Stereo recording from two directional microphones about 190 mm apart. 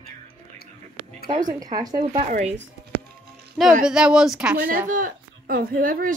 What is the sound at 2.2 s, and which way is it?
Speech, 40° right (ahead or behind).